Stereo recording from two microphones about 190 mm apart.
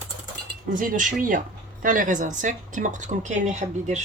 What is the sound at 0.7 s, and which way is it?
Speech, 45° right (ahead or behind).